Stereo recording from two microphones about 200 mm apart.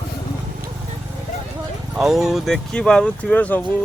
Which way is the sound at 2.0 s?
Centre (ahead or behind).